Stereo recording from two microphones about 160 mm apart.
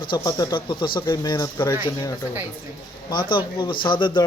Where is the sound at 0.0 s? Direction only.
25° left (ahead or behind).